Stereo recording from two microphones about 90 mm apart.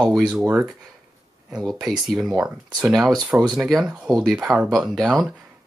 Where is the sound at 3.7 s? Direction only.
Centre (ahead or behind).